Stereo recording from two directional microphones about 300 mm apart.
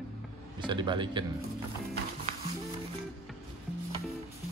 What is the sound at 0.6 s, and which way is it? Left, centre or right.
Speech, centre.